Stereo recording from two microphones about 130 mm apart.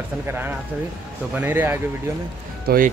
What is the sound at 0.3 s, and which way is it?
Speech, 15° right (ahead or behind).